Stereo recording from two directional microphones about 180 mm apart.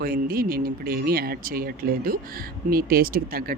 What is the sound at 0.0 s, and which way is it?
Speech, 55° right (ahead or behind).